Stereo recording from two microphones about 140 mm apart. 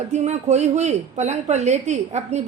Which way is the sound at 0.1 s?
55° right (ahead or behind).